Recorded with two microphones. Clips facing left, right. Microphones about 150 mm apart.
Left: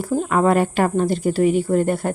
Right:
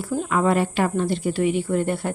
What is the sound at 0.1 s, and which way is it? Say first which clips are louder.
Speech: left 3 dB; 45° left (ahead or behind).